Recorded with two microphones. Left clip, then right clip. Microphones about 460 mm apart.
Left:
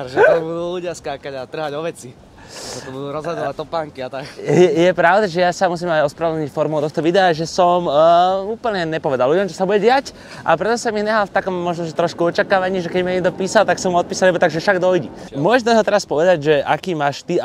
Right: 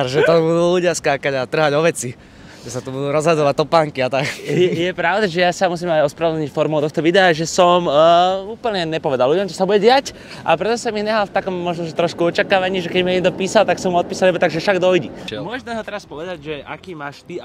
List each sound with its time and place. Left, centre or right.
0.3 s speech: right
3.0 s speech: right
4.5 s speech: left
4.9 s speech: centre
5.2 s speech: centre
15.6 s speech: left